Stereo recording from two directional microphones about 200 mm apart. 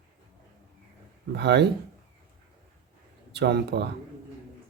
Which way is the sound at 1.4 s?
55° right (ahead or behind).